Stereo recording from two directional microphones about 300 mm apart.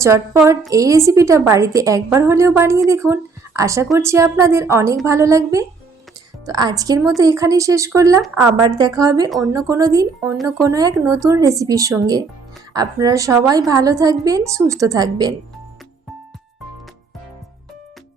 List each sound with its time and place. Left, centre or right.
0.0 s a woman's voice: centre
9.3 s speech: centre
9.6 s a woman's voice: centre